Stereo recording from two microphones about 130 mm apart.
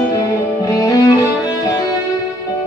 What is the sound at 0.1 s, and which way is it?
Music, 25° left (ahead or behind).